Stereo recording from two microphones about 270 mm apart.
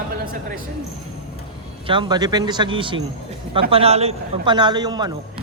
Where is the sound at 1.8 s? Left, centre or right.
Centre.